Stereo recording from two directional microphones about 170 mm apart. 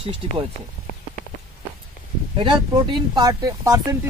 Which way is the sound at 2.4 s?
30° right (ahead or behind).